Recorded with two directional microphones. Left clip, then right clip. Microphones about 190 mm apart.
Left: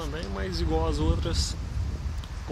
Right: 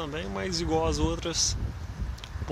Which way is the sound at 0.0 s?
10° right (ahead or behind).